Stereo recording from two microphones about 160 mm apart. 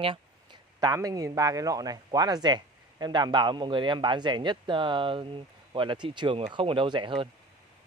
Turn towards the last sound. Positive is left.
turn(degrees=-30)  # may be behind; listen again after turning